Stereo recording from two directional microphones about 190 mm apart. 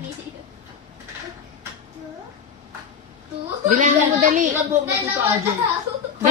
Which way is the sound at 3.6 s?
40° right (ahead or behind).